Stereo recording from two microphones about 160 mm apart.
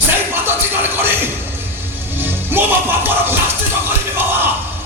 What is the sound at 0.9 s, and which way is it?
Music, 15° right (ahead or behind).